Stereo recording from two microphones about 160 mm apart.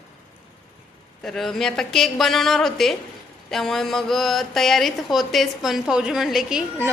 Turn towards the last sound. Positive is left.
turn(degrees=-5)  # may be behind; listen again after turning